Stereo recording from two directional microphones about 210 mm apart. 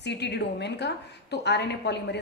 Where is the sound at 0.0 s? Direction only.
55° left (ahead or behind).